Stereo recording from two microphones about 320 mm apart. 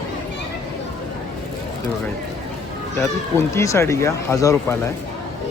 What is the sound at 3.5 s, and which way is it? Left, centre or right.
Speech, centre.